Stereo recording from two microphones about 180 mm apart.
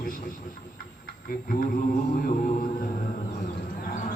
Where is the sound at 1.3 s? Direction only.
50° left (ahead or behind).